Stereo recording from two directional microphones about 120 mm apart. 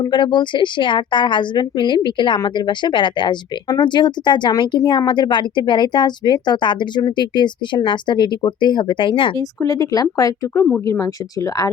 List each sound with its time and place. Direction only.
0.0 s a woman's voice: 40° left (ahead or behind)
9.4 s speech: 30° left (ahead or behind)